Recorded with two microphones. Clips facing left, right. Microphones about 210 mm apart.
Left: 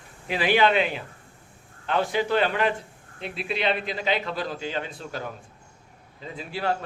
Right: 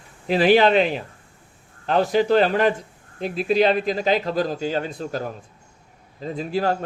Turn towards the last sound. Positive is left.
turn(degrees=-40)  # may be behind; listen again after turning